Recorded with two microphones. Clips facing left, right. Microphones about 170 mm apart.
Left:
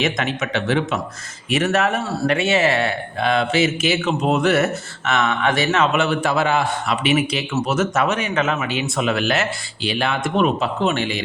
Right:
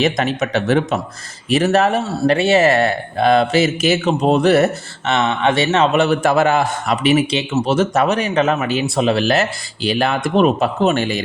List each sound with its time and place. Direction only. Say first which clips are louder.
0.0 s speech: right 5 dB; 35° right (ahead or behind)